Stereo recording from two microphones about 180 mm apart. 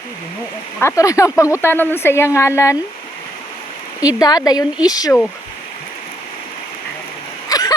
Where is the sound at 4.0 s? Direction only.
20° left (ahead or behind).